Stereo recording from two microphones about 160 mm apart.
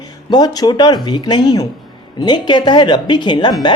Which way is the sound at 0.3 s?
25° left (ahead or behind).